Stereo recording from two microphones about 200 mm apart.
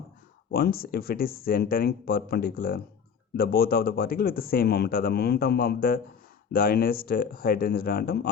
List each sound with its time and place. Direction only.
0.5 s speech: 50° left (ahead or behind)